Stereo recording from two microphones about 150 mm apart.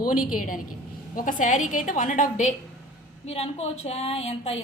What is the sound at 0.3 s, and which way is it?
A woman's voice, 65° left (ahead or behind).